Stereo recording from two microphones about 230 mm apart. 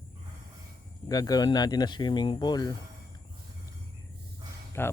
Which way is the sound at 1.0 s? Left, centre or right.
Centre.